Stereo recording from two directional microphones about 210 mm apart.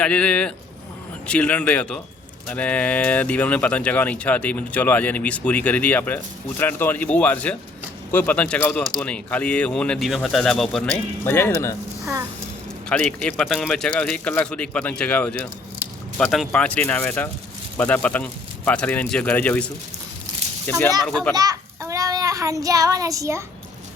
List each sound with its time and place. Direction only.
0.0 s speech: 5° left (ahead or behind)
12.9 s speech: 5° left (ahead or behind)
21.3 s a child's voice: 15° right (ahead or behind)